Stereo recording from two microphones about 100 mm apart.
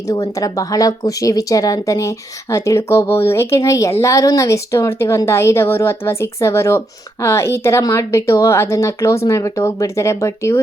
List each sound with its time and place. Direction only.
0.1 s a woman's voice: 35° left (ahead or behind)